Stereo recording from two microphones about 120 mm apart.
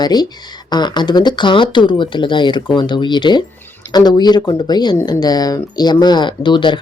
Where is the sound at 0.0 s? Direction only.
35° left (ahead or behind).